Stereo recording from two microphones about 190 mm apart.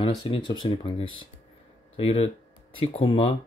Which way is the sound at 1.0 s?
90° left.